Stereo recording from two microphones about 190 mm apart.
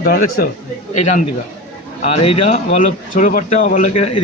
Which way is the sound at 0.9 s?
40° left (ahead or behind).